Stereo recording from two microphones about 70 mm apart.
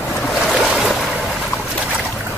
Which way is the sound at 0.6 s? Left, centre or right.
Centre.